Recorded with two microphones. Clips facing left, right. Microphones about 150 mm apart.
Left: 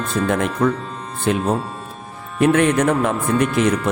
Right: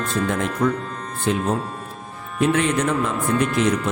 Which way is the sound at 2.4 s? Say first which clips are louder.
Left 4 dB; 60° left (ahead or behind).